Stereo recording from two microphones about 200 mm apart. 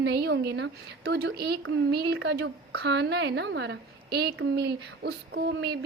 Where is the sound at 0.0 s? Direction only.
55° right (ahead or behind).